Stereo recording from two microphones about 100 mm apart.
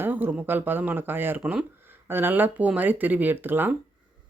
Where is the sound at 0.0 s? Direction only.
20° right (ahead or behind).